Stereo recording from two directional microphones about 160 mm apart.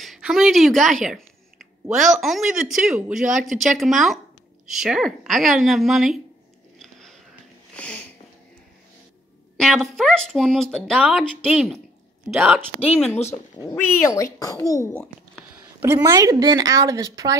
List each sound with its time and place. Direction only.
0.0 s speech: centre (ahead or behind)
6.8 s biting: centre (ahead or behind)
7.7 s a sound: 5° left (ahead or behind)
9.6 s speech: centre (ahead or behind)
11.0 s speech: 5° right (ahead or behind)
11.5 s speech: 5° left (ahead or behind)
14.0 s a child's voice: 20° left (ahead or behind)
15.8 s speech: 20° right (ahead or behind)